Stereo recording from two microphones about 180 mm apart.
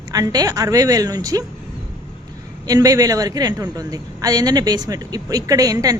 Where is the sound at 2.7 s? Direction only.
20° right (ahead or behind).